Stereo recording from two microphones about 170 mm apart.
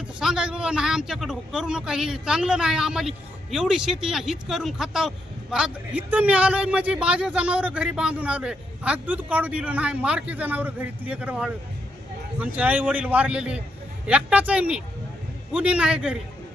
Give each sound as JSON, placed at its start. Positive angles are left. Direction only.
{"t": 0.2, "sound": "a man's voice", "side_deg": -5}